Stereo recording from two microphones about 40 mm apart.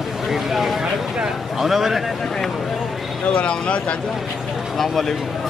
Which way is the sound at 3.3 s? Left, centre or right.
Left.